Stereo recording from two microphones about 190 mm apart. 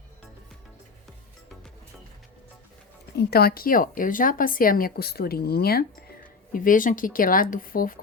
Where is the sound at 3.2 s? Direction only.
55° left (ahead or behind).